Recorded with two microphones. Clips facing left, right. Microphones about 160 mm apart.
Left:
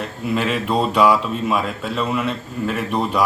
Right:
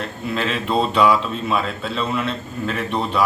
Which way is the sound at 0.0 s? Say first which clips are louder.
Left 2 dB; 10° left (ahead or behind).